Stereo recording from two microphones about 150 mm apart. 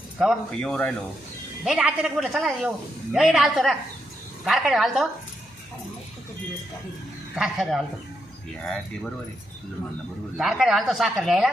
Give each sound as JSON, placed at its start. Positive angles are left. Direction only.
{"t": 0.6, "sound": "speech", "side_deg": 5}
{"t": 1.6, "sound": "speech", "side_deg": -5}
{"t": 7.3, "sound": "speech", "side_deg": 0}
{"t": 10.3, "sound": "speech", "side_deg": 0}